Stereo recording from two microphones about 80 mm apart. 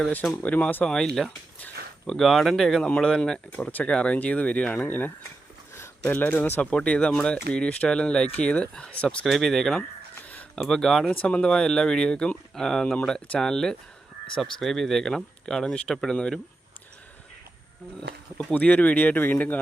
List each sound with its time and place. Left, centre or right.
0.4 s speech: centre
0.9 s speech: centre
9.2 s speech: centre
18.5 s speech: centre